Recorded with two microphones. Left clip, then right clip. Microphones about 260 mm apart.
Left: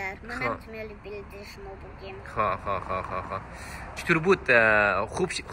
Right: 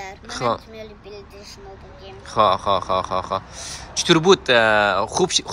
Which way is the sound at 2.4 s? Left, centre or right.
Right.